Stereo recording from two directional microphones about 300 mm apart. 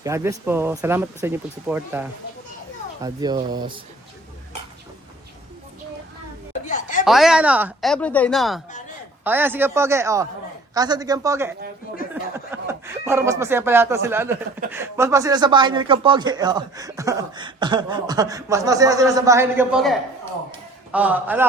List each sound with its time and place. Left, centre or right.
0.0 s speech: centre
6.7 s a sound: left
7.0 s speech: centre